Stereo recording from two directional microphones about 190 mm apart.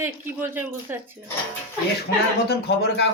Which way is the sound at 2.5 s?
60° left (ahead or behind).